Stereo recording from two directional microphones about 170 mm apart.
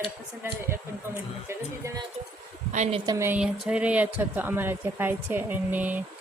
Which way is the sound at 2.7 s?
45° right (ahead or behind).